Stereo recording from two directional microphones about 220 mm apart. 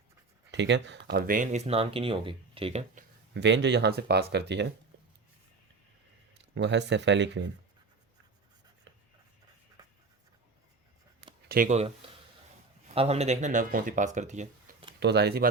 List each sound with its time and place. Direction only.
0.5 s speech: 55° right (ahead or behind)
1.1 s speech: 40° right (ahead or behind)
3.4 s speech: 50° right (ahead or behind)
6.4 s speech: 55° right (ahead or behind)
11.4 s speech: 40° right (ahead or behind)
12.9 s speech: 25° right (ahead or behind)
15.0 s speech: 50° right (ahead or behind)